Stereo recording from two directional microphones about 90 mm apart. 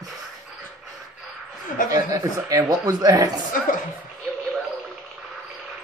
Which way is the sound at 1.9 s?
40° right (ahead or behind).